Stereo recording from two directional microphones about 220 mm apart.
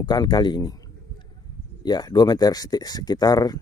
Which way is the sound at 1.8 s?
20° left (ahead or behind).